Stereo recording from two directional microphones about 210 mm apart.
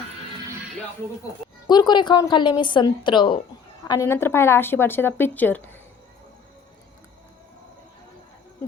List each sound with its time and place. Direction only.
1.6 s a woman's voice: 20° left (ahead or behind)